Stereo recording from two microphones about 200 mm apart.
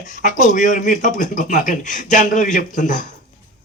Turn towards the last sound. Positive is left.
turn(degrees=40)  # may be behind; listen again after turning